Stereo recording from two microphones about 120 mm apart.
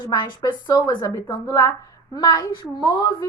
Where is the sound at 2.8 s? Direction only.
30° left (ahead or behind).